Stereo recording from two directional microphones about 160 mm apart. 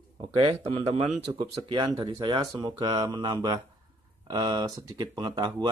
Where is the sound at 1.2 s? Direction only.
25° right (ahead or behind).